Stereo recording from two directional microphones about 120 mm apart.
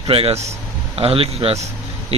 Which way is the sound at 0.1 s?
50° right (ahead or behind).